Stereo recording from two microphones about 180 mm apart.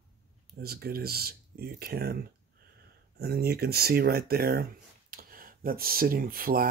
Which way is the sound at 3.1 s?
55° right (ahead or behind).